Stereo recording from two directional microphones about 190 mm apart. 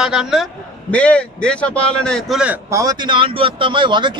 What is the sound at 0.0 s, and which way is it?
A man's voice, 5° right (ahead or behind).